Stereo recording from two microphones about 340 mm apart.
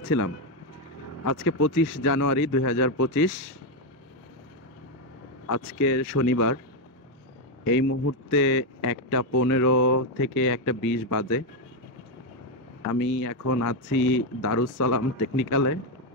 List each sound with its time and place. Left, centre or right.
1.2 s speech: left
1.7 s speech: left
2.0 s speech: left
5.8 s speech: left
7.6 s speech: left
13.2 s speech: left
13.8 s speech: left
14.1 s speech: left
14.6 s speech: left